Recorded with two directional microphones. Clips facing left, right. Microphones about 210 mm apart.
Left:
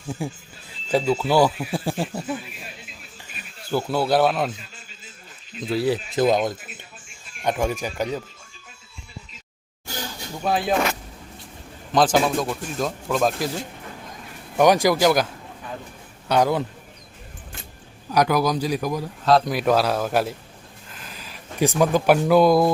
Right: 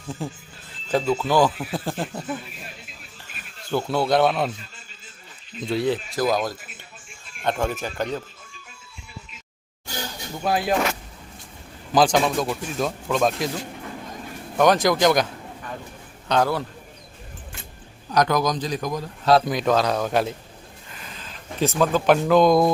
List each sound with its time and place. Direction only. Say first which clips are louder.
0.2 s speech: left 2 dB; 10° left (ahead or behind)
3.7 s speech: even; 5° left (ahead or behind)
5.5 s speech: left 1 dB; centre (ahead or behind)
6.1 s speech: left 3 dB; 25° left (ahead or behind)
7.5 s speech: left 3 dB; 10° left (ahead or behind)
10.4 s speech: even; 5° right (ahead or behind)
11.9 s speech: even; centre (ahead or behind)
14.6 s a man's voice: left 1 dB; 10° left (ahead or behind)
18.1 s speech: left 1 dB; 10° left (ahead or behind)
20.8 s a sound: left 1 dB; centre (ahead or behind)